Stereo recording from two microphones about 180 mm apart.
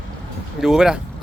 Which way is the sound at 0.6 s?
5° right (ahead or behind).